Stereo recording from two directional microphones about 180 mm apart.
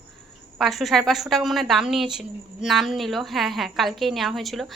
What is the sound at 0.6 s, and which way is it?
A woman's voice, centre (ahead or behind).